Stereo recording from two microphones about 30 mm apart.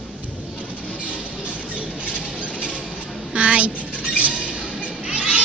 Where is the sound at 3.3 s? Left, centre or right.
Right.